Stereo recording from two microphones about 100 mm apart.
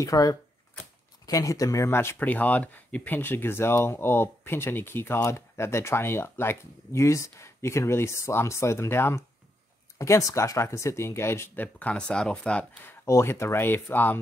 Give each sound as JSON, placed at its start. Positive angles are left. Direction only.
{"t": 0.0, "sound": "speech", "side_deg": 35}
{"t": 13.0, "sound": "speech", "side_deg": 30}